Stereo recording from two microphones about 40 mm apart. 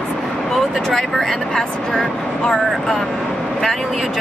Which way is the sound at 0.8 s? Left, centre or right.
Centre.